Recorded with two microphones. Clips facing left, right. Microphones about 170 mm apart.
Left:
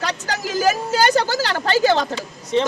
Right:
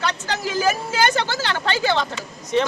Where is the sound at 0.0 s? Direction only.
40° left (ahead or behind).